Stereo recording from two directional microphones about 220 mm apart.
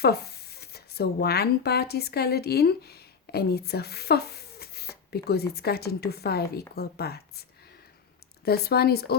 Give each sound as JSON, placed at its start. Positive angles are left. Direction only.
{"t": 0.0, "sound": "speech", "side_deg": 45}
{"t": 8.4, "sound": "speech", "side_deg": 45}